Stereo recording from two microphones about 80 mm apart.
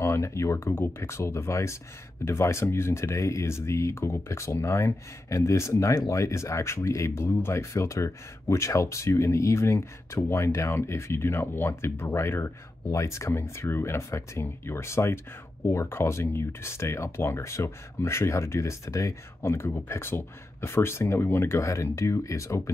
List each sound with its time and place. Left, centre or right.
0.0 s speech: left